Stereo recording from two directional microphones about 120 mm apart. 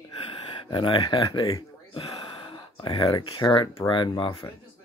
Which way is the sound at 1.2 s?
30° left (ahead or behind).